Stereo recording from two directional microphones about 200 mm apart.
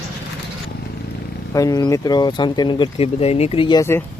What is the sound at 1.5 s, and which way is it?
Speech, 15° left (ahead or behind).